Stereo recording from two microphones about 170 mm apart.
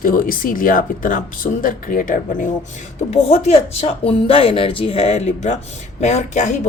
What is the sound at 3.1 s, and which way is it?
Speech, 40° left (ahead or behind).